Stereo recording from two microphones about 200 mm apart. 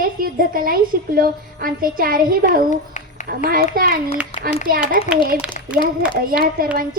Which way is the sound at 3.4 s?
45° right (ahead or behind).